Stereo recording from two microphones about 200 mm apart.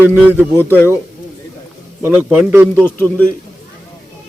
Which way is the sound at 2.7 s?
10° left (ahead or behind).